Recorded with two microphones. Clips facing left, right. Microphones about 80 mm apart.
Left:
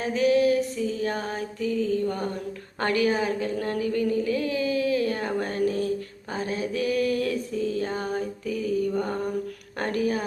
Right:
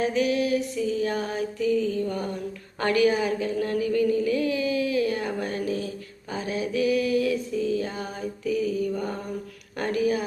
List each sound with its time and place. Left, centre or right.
0.0 s music: left
2.8 s a sound: left
6.3 s mantra: left
9.7 s a woman's voice: left